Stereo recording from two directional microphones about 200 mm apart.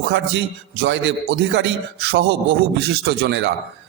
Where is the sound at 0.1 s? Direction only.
60° right (ahead or behind).